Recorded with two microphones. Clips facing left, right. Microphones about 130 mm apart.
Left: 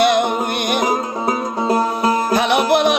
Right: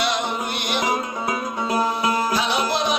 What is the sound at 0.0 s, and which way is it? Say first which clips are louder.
Music: left 9 dB; 55° left (ahead or behind).